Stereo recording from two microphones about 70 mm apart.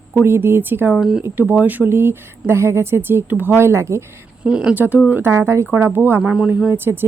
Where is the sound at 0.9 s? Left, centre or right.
Centre.